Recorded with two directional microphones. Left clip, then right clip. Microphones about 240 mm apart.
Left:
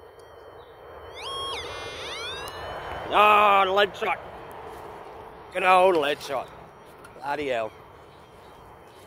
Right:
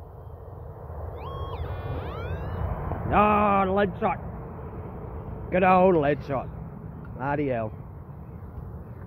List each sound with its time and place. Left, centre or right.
1.1 s music: left
3.1 s speech: centre
5.5 s speech: centre